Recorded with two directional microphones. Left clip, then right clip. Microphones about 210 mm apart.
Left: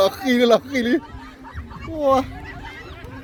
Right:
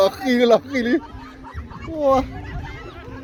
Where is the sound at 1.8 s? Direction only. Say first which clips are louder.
Even; 5° left (ahead or behind).